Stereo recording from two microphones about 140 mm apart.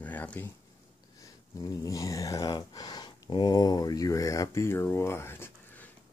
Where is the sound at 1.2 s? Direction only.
25° left (ahead or behind).